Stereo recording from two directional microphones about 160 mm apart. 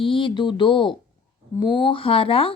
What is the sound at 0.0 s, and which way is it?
Speech, 30° left (ahead or behind).